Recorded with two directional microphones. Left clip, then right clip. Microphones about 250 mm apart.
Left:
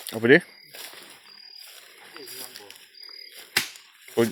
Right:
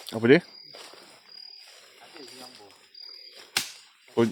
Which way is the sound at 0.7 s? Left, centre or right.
Left.